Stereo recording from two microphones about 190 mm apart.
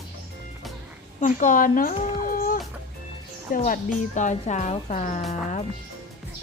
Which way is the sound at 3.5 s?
50° left (ahead or behind).